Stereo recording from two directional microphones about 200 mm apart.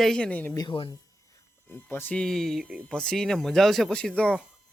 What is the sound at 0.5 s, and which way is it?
Speech, 25° left (ahead or behind).